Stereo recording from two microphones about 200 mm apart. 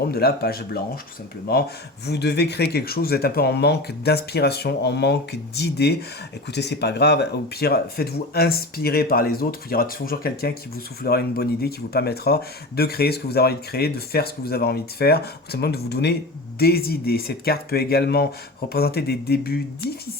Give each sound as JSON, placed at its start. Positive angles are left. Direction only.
{"t": 0.0, "sound": "speech", "side_deg": 50}